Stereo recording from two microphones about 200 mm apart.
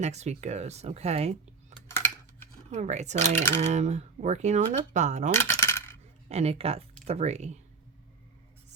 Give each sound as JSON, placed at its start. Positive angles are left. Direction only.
{"t": 0.0, "sound": "speech", "side_deg": -35}
{"t": 2.6, "sound": "speech", "side_deg": -35}
{"t": 5.4, "sound": "coin", "side_deg": 15}
{"t": 6.2, "sound": "speech", "side_deg": -30}